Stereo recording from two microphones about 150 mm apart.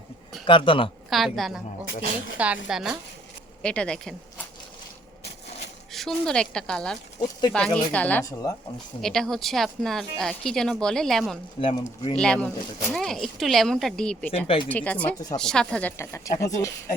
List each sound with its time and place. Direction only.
0.4 s speech: 35° left (ahead or behind)
1.1 s speech: centre (ahead or behind)
3.6 s speech: 5° left (ahead or behind)
5.9 s speech: 5° left (ahead or behind)
8.2 s speech: 25° left (ahead or behind)
9.0 s speech: 5° left (ahead or behind)
11.6 s speech: 35° left (ahead or behind)
12.1 s speech: 5° left (ahead or behind)
14.3 s speech: 40° left (ahead or behind)
14.7 s speech: 10° left (ahead or behind)